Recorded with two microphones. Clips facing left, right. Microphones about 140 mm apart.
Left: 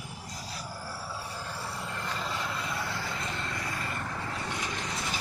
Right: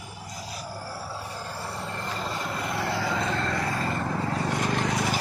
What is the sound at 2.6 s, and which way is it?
Vehicle, 75° right (ahead or behind).